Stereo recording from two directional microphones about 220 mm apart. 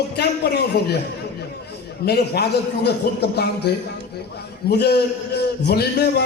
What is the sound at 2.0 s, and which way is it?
A man's voice, 45° left (ahead or behind).